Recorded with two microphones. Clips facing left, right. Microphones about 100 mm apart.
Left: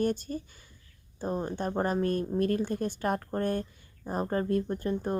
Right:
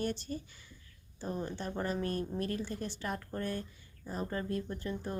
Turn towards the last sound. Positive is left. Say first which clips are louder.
# left 8 dB
turn(degrees=45)  # may be behind; listen again after turning